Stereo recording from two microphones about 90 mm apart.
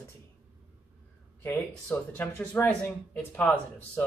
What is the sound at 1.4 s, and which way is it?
Speech, 20° left (ahead or behind).